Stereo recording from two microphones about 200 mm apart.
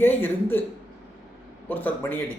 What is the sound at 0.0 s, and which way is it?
Speech, 10° left (ahead or behind).